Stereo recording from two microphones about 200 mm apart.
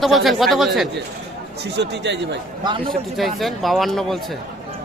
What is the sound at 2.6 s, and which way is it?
Speech, 25° right (ahead or behind).